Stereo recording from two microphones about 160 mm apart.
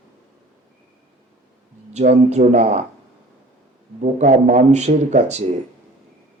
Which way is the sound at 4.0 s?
50° right (ahead or behind).